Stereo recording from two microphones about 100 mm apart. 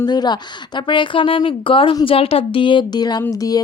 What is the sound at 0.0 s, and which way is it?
A woman's voice, 45° left (ahead or behind).